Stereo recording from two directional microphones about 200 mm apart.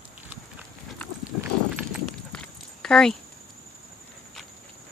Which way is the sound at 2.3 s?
5° left (ahead or behind).